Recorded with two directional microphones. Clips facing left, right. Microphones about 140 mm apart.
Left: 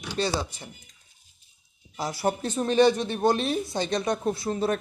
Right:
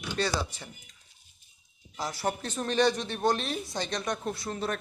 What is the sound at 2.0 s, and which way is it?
Speech, 10° left (ahead or behind).